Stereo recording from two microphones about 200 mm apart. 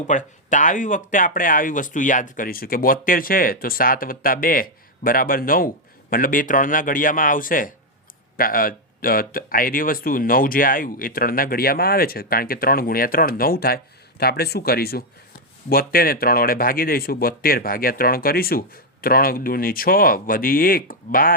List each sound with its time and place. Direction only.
0.1 s speech: 40° left (ahead or behind)